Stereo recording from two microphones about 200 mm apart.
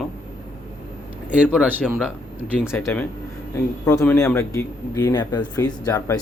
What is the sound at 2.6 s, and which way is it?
Speech, 10° left (ahead or behind).